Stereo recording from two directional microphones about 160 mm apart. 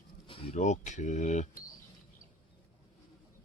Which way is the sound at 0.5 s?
50° left (ahead or behind).